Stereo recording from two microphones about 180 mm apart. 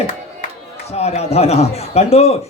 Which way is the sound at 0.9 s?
35° left (ahead or behind).